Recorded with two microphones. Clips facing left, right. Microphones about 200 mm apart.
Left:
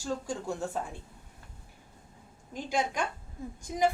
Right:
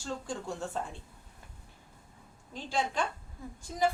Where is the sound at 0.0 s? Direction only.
10° left (ahead or behind).